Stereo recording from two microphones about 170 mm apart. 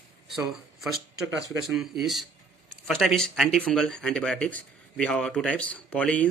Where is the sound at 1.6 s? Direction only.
5° right (ahead or behind).